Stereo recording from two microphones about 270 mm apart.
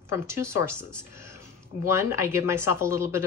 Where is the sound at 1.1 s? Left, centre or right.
Centre.